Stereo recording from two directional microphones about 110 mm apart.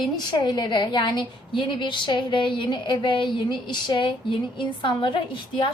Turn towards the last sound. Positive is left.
turn(degrees=50)  # may be behind; listen again after turning